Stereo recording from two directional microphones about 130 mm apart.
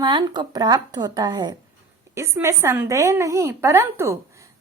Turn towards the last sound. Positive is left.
turn(degrees=-20)  # may be behind; listen again after turning